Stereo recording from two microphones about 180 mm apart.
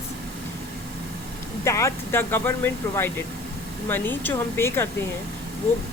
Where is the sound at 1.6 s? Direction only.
15° left (ahead or behind).